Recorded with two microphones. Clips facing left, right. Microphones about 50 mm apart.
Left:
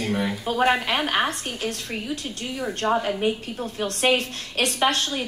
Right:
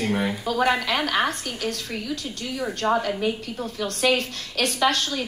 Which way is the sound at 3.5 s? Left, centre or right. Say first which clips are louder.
Even; left.